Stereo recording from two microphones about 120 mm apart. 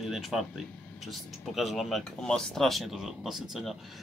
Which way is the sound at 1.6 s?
Centre (ahead or behind).